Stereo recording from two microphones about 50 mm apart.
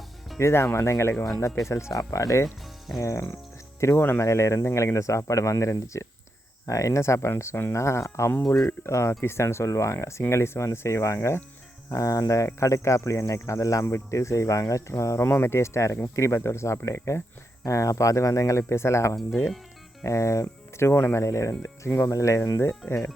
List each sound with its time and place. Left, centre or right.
0.3 s speech: left
1.6 s speech: left
11.9 s speech: left
20.1 s speech: left
21.2 s speech: left
21.8 s speech: left
22.1 s speech: left
22.4 s speech: left